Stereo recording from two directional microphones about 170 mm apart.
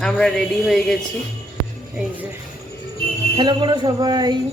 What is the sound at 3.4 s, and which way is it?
Speech, 25° right (ahead or behind).